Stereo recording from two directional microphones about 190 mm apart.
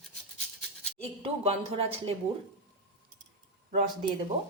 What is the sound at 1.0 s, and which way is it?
Speech, 30° right (ahead or behind).